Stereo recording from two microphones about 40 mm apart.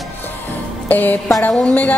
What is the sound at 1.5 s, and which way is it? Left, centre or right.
Speech, centre.